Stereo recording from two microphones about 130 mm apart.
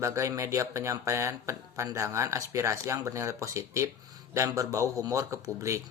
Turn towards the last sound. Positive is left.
turn(degrees=-25)  # may be behind; listen again after turning